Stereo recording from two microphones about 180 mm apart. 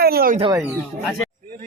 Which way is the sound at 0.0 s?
55° right (ahead or behind).